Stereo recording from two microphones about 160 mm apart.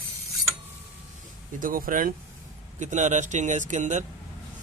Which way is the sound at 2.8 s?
50° right (ahead or behind).